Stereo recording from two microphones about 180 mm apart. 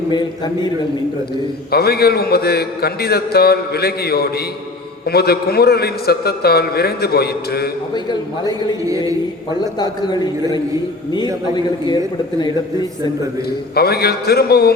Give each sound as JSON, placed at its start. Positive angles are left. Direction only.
{"t": 0.1, "sound": "a man's voice", "side_deg": 25}
{"t": 1.7, "sound": "a man's voice", "side_deg": 60}
{"t": 8.8, "sound": "a man's voice", "side_deg": -20}
{"t": 9.6, "sound": "a man's voice", "side_deg": 20}
{"t": 13.7, "sound": "a man's voice", "side_deg": 60}